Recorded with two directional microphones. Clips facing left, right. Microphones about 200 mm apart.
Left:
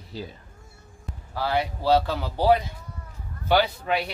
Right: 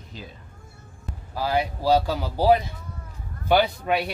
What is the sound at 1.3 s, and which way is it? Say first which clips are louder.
Speech: right 1 dB; 10° right (ahead or behind).